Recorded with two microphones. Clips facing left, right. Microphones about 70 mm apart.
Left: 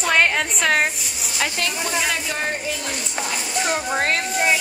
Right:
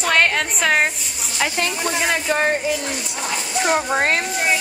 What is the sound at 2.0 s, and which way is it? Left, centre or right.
Speech, right.